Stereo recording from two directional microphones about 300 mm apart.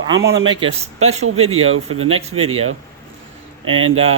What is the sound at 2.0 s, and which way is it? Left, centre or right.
Speech, centre.